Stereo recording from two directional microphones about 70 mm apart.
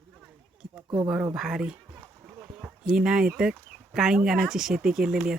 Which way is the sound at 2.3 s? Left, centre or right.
Centre.